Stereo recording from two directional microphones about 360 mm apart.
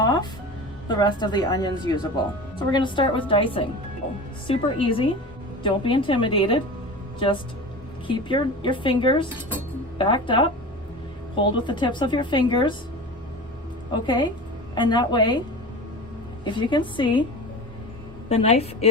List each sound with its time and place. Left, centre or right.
0.0 s music: centre
0.9 s speech: centre
13.9 s speech: centre
16.4 s speech: centre
18.3 s speech: centre